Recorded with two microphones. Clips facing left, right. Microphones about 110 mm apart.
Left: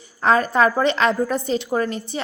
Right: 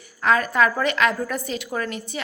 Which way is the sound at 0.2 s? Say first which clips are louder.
Left 3 dB; 30° left (ahead or behind).